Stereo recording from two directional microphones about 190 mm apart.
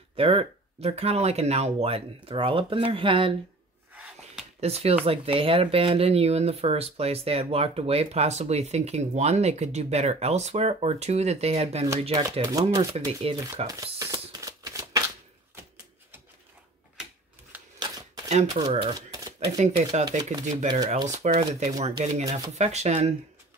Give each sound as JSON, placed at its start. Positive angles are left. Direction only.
{"t": 0.1, "sound": "speech", "side_deg": -30}
{"t": 3.9, "sound": "a sound", "side_deg": -10}
{"t": 4.6, "sound": "speech", "side_deg": -35}
{"t": 12.2, "sound": "speech", "side_deg": -15}
{"t": 12.9, "sound": "speech", "side_deg": -30}
{"t": 13.7, "sound": "a sound", "side_deg": -15}
{"t": 14.3, "sound": "shuffling cards", "side_deg": -20}
{"t": 17.7, "sound": "a sound", "side_deg": -20}
{"t": 18.3, "sound": "speech", "side_deg": -35}
{"t": 18.9, "sound": "typewriter", "side_deg": -20}
{"t": 19.4, "sound": "speech", "side_deg": -35}